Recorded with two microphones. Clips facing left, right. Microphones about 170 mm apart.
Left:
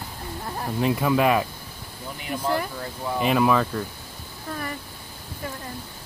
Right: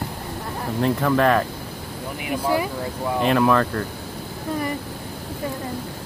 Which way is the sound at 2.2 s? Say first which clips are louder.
Right 3 dB; 10° right (ahead or behind).